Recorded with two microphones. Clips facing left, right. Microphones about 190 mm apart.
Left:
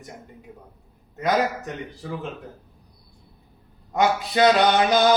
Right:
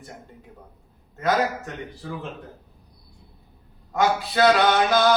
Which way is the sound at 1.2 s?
15° left (ahead or behind).